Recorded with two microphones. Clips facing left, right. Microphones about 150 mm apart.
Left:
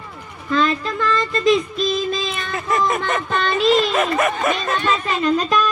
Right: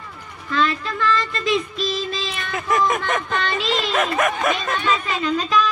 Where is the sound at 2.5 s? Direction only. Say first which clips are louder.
Right 1 dB; centre (ahead or behind).